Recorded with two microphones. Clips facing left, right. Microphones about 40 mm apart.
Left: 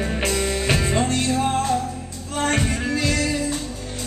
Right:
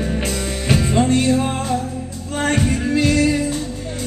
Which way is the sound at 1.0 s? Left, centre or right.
Centre.